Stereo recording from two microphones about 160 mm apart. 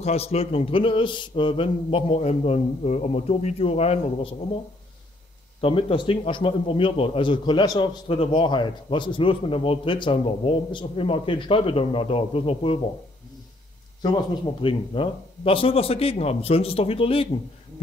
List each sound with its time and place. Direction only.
0.0 s a man's voice: 40° left (ahead or behind)
5.6 s a man's voice: 35° left (ahead or behind)
8.1 s a man's voice: 35° left (ahead or behind)
14.4 s a man's voice: 30° left (ahead or behind)